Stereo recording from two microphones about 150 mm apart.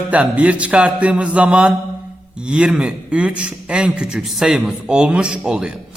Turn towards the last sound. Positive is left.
turn(degrees=-5)  # may be behind; listen again after turning